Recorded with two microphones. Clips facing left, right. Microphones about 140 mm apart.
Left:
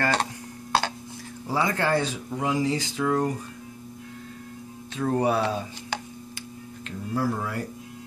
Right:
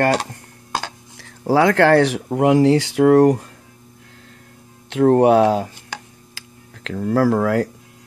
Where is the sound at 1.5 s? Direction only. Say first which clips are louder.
Right 11 dB; 80° right.